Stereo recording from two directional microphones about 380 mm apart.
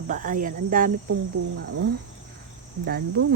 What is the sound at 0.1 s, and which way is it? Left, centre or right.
Speech, right.